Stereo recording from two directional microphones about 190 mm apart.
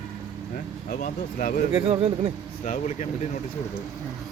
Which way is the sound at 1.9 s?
30° right (ahead or behind).